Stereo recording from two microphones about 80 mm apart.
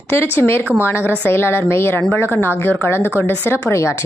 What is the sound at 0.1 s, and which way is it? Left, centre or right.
A woman's voice, left.